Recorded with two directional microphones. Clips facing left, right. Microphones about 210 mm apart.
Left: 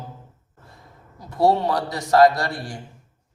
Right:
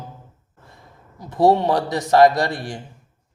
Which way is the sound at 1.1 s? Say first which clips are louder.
Right 3 dB; 20° right (ahead or behind).